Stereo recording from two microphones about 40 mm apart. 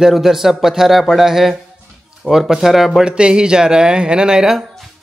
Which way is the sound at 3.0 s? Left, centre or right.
Right.